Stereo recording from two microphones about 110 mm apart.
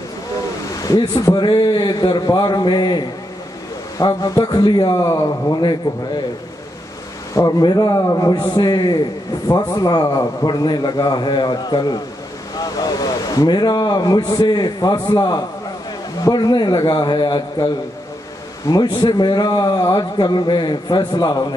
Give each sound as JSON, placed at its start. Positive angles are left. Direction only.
{"t": 0.8, "sound": "a man's voice", "side_deg": 35}
{"t": 7.3, "sound": "a man's voice", "side_deg": 35}